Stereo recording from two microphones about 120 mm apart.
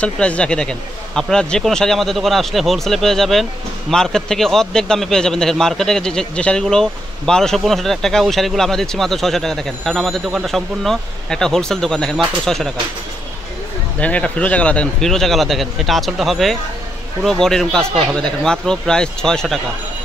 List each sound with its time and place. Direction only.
0.0 s a man's voice: 10° left (ahead or behind)
13.9 s a man's voice: 10° left (ahead or behind)